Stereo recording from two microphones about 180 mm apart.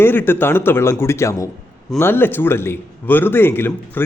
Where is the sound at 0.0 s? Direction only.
10° left (ahead or behind).